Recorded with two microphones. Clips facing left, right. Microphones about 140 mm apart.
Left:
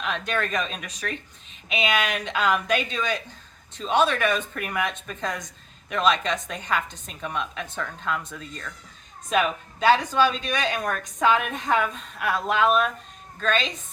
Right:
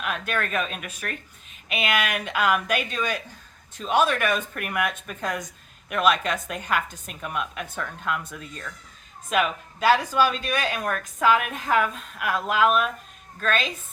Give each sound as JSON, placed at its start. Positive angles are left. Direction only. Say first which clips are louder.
{"t": 0.0, "sound": "a woman's voice", "louder": "left 1 dB", "side_deg": -5}